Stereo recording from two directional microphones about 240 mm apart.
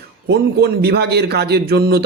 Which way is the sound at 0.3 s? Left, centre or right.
Right.